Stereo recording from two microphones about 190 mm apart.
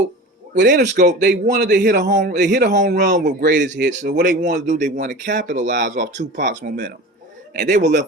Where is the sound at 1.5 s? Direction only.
60° right (ahead or behind).